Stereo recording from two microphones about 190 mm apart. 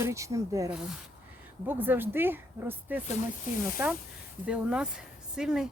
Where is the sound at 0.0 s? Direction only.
15° right (ahead or behind).